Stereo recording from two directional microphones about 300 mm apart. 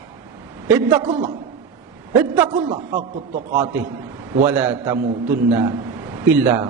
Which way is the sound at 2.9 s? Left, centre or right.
Right.